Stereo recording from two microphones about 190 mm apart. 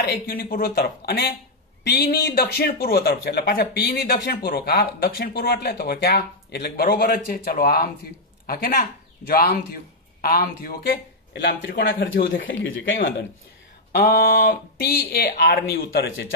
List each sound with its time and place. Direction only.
0.0 s speech: 50° left (ahead or behind)
12.4 s speech: 90° left
13.9 s speech: 50° left (ahead or behind); by 16.3 s 70° left (ahead or behind)